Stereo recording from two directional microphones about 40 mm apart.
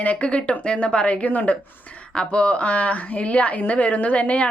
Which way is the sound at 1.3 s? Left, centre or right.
Left.